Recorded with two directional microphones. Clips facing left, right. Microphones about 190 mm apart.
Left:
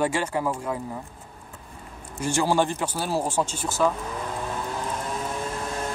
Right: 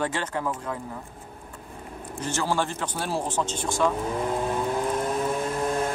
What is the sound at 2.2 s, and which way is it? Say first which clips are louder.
Speech: left 4 dB; 10° left (ahead or behind).